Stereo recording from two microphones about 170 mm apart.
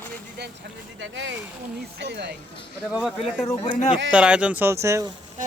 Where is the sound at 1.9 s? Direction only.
90° right.